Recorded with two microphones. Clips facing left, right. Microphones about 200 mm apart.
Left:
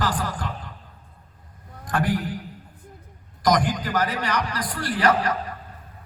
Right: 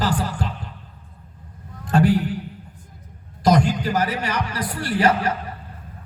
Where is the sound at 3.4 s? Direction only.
25° right (ahead or behind).